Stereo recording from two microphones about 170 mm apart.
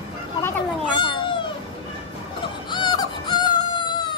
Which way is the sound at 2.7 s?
25° left (ahead or behind).